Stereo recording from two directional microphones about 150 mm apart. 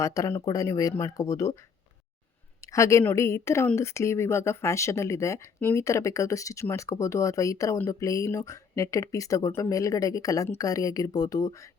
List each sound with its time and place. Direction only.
0.0 s speech: 20° left (ahead or behind)
2.6 s speech: 20° left (ahead or behind)